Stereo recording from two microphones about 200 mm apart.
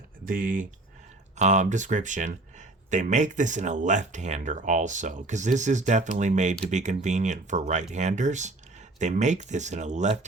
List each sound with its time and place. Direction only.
0.3 s speech: 45° right (ahead or behind)